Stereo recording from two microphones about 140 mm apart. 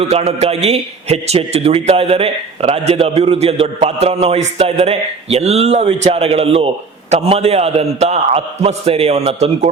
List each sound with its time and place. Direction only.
0.1 s speech: 50° right (ahead or behind)